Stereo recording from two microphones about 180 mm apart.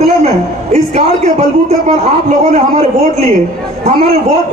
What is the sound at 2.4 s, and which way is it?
Speech, 40° right (ahead or behind).